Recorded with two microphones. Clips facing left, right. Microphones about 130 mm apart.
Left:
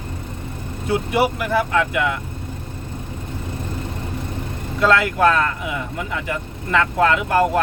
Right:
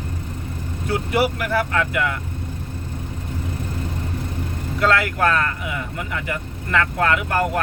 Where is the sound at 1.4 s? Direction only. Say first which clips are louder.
Left 2 dB; 20° left (ahead or behind).